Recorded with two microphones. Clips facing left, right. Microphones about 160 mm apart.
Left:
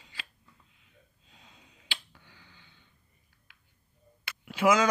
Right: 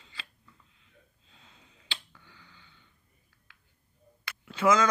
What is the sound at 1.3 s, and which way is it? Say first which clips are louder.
Finger snapping: left 1 dB; 15° left (ahead or behind).